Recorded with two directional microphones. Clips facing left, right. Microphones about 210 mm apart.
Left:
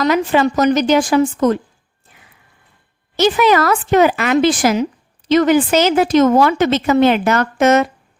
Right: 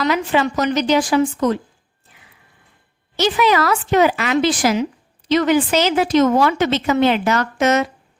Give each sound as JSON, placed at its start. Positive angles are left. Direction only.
{"t": 0.0, "sound": "a woman's voice", "side_deg": 45}
{"t": 3.2, "sound": "a woman's voice", "side_deg": 50}